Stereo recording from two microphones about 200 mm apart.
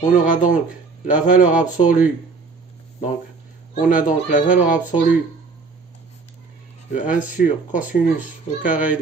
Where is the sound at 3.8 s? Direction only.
40° left (ahead or behind).